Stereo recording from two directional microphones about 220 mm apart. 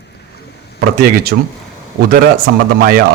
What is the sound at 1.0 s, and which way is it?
Speech, 45° right (ahead or behind).